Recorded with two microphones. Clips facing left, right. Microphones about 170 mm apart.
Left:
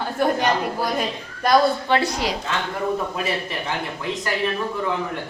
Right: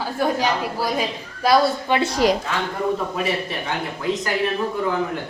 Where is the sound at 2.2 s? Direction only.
45° right (ahead or behind).